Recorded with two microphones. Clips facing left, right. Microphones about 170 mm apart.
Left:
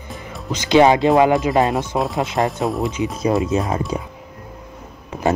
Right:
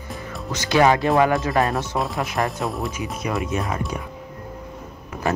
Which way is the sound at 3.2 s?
30° left (ahead or behind).